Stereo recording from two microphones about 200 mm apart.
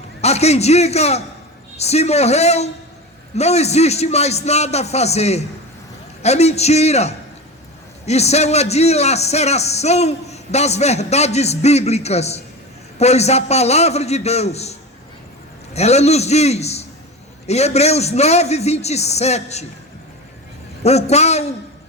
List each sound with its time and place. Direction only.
0.2 s a man's voice: 30° left (ahead or behind)
20.8 s a man's voice: 35° left (ahead or behind)